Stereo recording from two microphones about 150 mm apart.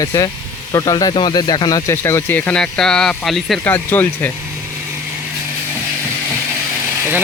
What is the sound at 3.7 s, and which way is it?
Speech, 10° left (ahead or behind).